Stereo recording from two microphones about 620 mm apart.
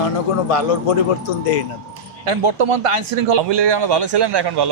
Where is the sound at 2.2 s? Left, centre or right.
Right.